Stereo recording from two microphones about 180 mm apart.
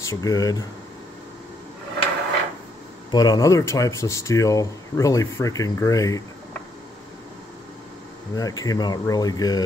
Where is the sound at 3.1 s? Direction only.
20° left (ahead or behind).